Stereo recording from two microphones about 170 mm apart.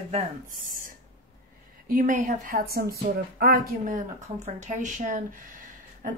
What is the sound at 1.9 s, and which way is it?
Speech, 55° right (ahead or behind).